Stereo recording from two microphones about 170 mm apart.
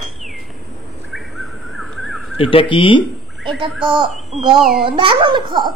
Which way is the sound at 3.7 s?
Centre (ahead or behind).